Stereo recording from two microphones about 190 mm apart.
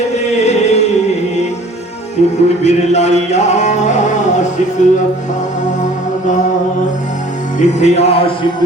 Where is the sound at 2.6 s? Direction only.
35° left (ahead or behind).